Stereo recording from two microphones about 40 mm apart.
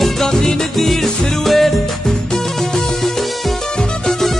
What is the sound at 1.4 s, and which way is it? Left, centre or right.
Music, centre.